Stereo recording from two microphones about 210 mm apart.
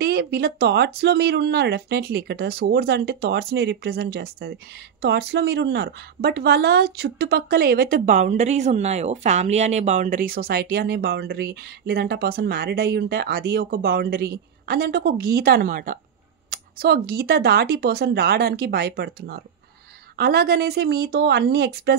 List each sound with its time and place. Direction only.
0.0 s a woman's voice: 50° right (ahead or behind)